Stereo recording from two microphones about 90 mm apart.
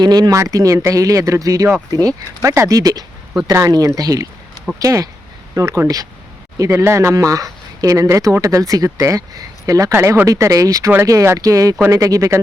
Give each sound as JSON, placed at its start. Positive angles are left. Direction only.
{"t": 0.0, "sound": "speech", "side_deg": -50}
{"t": 9.9, "sound": "speech", "side_deg": -30}